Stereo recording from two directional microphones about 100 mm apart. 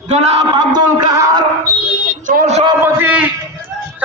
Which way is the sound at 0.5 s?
45° right (ahead or behind).